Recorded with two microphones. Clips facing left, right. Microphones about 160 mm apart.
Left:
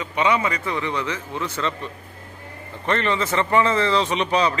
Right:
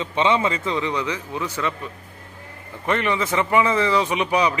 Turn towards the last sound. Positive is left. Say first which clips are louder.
# even
turn(degrees=-10)  # may be behind; listen again after turning